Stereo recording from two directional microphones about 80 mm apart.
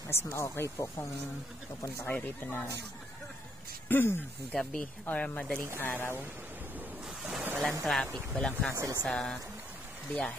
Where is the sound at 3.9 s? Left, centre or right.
Left.